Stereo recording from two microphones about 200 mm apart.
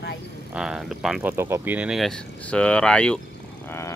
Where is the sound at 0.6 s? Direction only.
5° right (ahead or behind).